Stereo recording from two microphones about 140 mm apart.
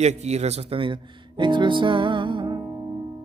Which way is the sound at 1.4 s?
35° right (ahead or behind).